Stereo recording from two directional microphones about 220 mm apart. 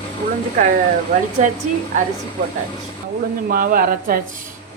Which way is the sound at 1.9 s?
35° right (ahead or behind).